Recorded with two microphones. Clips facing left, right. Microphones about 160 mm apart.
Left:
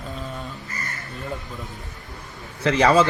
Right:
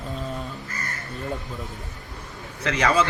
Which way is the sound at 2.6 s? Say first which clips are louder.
Left 5 dB; 30° left (ahead or behind).